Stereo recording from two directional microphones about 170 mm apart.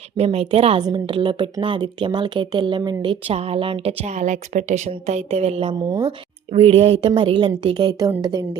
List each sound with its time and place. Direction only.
0.2 s a woman's voice: 35° right (ahead or behind)
0.8 s a woman's voice: 25° right (ahead or behind)
5.9 s speech: 20° right (ahead or behind)
6.5 s a woman's voice: 35° right (ahead or behind)